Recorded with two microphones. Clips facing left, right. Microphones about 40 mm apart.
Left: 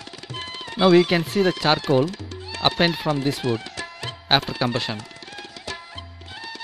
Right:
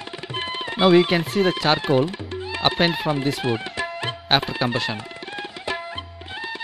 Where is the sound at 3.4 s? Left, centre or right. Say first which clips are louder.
Right 2 dB; right.